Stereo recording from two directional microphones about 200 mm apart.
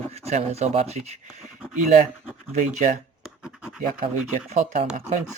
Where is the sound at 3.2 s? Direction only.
5° right (ahead or behind).